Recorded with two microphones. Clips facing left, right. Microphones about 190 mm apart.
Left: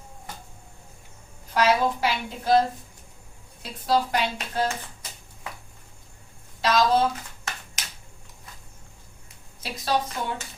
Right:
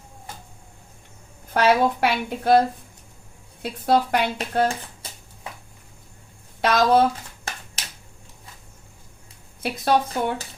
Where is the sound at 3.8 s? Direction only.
60° right (ahead or behind).